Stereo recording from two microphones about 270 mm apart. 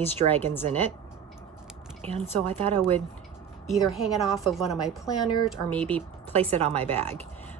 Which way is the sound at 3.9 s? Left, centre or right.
Centre.